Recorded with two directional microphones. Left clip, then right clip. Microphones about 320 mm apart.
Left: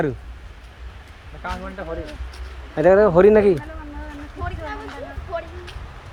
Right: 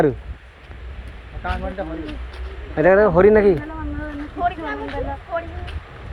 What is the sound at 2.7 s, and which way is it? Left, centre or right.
Speech, centre.